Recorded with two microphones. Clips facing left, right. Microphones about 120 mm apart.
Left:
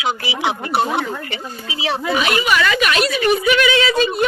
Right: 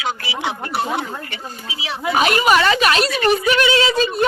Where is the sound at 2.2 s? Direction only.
40° right (ahead or behind).